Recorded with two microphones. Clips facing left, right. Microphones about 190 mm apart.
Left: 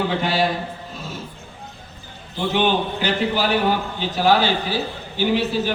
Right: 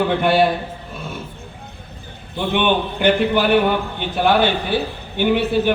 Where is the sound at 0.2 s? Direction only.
55° right (ahead or behind).